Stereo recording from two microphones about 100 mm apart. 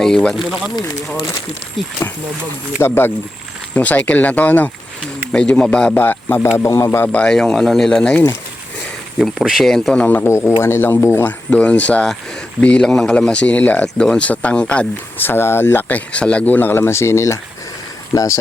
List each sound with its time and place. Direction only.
0.0 s speech: 5° left (ahead or behind)
2.8 s speech: 25° left (ahead or behind); by 5.9 s 10° left (ahead or behind)
5.9 s speech: 20° left (ahead or behind)
9.1 s speech: 5° right (ahead or behind); by 10.2 s 15° left (ahead or behind)
10.2 s speech: 30° left (ahead or behind)